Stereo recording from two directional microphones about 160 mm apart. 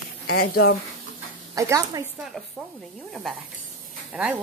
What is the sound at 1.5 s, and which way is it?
Speech, 20° right (ahead or behind).